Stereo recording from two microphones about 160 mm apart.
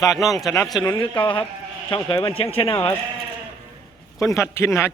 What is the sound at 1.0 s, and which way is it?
Speech, 35° left (ahead or behind).